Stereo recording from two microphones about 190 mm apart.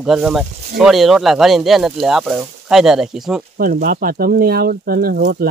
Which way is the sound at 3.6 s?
45° right (ahead or behind).